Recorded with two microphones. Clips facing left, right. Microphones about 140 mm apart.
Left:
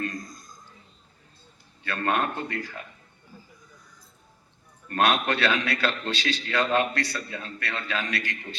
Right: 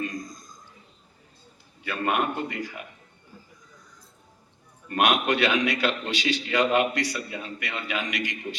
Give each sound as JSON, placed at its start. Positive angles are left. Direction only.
{"t": 0.0, "sound": "a sound", "side_deg": -15}
{"t": 1.8, "sound": "a man's voice", "side_deg": -10}
{"t": 4.9, "sound": "a man's voice", "side_deg": -15}